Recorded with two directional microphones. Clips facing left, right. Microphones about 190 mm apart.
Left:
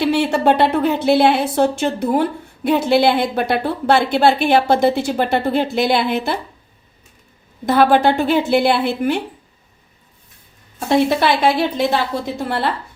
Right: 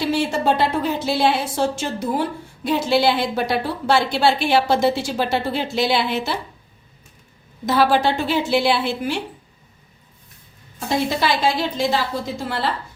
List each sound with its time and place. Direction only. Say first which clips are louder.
0.0 s a woman's voice: left 4 dB; 65° left (ahead or behind)
7.6 s a woman's voice: left 4 dB; 55° left (ahead or behind)
10.8 s a woman's voice: left 5 dB; 60° left (ahead or behind)